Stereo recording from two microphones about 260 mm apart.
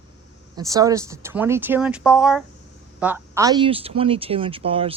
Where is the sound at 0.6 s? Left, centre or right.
Centre.